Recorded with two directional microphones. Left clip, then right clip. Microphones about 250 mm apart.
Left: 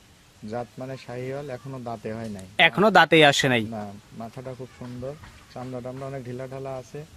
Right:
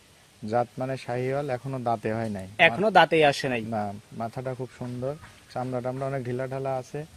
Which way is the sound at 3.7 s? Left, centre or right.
Right.